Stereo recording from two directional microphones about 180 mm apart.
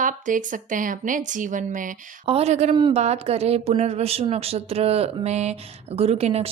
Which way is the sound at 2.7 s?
25° right (ahead or behind).